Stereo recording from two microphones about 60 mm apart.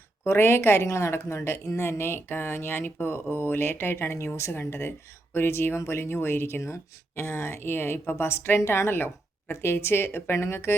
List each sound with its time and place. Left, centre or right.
0.3 s a woman's voice: left